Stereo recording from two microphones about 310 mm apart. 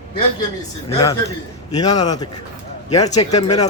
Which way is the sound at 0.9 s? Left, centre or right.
Centre.